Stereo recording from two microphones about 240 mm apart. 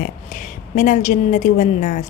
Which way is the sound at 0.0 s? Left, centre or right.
Left.